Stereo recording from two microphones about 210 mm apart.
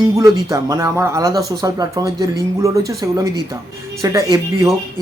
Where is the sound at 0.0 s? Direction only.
15° right (ahead or behind).